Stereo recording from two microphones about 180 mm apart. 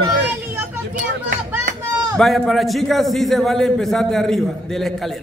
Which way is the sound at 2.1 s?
Centre (ahead or behind).